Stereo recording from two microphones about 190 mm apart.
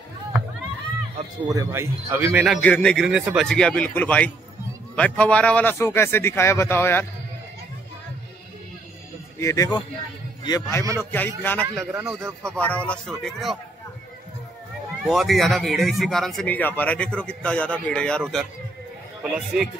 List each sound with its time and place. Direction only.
1.5 s speech: 15° right (ahead or behind)
2.6 s speech: 5° left (ahead or behind)
9.4 s a man's voice: 15° left (ahead or behind)
11.6 s speech: 10° right (ahead or behind)
12.5 s speech: 5° left (ahead or behind)
15.0 s speech: centre (ahead or behind)